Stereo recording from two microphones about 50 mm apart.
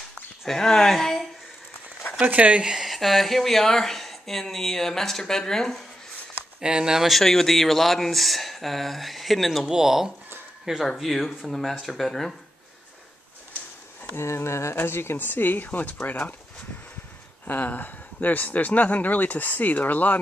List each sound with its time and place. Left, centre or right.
0.5 s speech: centre
2.1 s speech: right
2.7 s speech: centre
6.6 s speech: centre
7.1 s speech: centre
9.7 s speech: centre
10.9 s speech: centre
14.0 s speech: left
14.8 s speech: left
17.5 s speech: left